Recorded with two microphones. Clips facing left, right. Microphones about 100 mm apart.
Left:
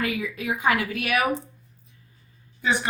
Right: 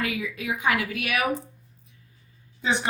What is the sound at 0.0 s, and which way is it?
Speech, 35° left (ahead or behind).